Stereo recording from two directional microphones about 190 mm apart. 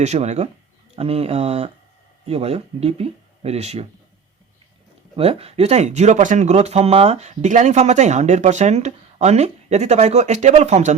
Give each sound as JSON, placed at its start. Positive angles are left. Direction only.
{"t": 0.0, "sound": "speech", "side_deg": -35}
{"t": 5.1, "sound": "speech", "side_deg": -30}